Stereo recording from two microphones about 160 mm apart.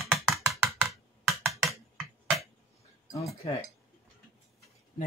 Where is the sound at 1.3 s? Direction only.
Centre (ahead or behind).